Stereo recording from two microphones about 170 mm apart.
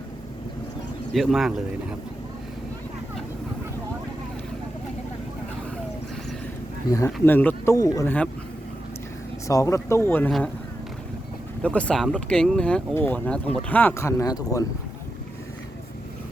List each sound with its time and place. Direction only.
1.1 s speech: centre (ahead or behind)
6.9 s speech: 15° left (ahead or behind)
9.5 s speech: 20° left (ahead or behind)
11.6 s speech: 10° left (ahead or behind)